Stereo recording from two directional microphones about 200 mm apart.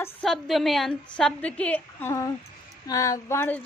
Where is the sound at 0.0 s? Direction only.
5° left (ahead or behind).